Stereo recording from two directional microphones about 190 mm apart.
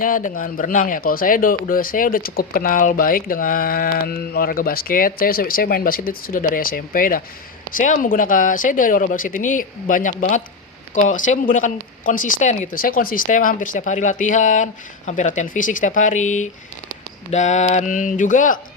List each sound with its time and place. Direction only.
0.0 s speech: 45° left (ahead or behind)